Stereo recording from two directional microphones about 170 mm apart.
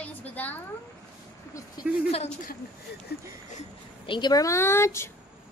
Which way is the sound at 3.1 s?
70° left (ahead or behind).